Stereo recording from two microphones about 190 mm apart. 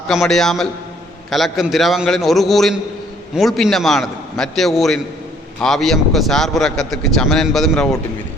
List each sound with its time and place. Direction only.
0.1 s a man's voice: centre (ahead or behind)